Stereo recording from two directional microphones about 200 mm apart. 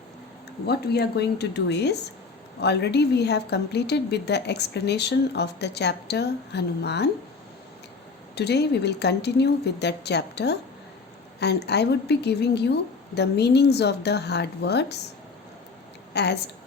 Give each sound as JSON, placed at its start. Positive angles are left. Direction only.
{"t": 0.7, "sound": "a woman's voice", "side_deg": 55}
{"t": 8.4, "sound": "a woman's voice", "side_deg": 55}
{"t": 16.1, "sound": "a woman's voice", "side_deg": 55}